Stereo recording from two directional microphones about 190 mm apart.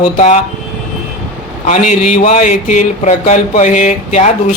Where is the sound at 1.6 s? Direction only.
40° left (ahead or behind).